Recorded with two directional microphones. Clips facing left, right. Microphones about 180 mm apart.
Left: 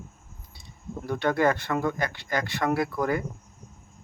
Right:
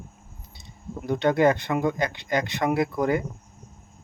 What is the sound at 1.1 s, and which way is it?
Speech, 20° right (ahead or behind).